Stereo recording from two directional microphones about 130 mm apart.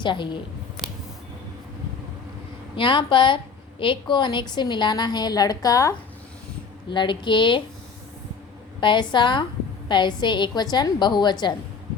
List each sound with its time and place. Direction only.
0.0 s a woman's voice: 35° left (ahead or behind)
2.7 s a woman's voice: 40° left (ahead or behind)
6.9 s a woman's voice: 40° left (ahead or behind)
8.8 s a woman's voice: 35° left (ahead or behind)